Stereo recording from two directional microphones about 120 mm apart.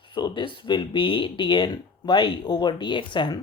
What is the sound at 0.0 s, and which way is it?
Speech, 40° left (ahead or behind).